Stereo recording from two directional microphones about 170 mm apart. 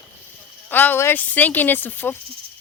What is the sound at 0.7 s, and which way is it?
Speech, 10° left (ahead or behind).